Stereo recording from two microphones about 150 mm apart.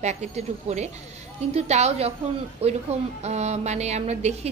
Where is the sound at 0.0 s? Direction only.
45° right (ahead or behind).